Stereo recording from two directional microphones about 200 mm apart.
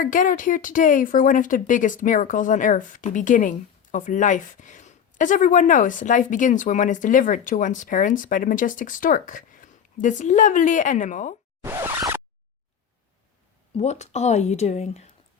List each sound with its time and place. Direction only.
0.0 s speech: 40° left (ahead or behind)
11.6 s zipper: 15° right (ahead or behind)
13.7 s speech: 35° left (ahead or behind)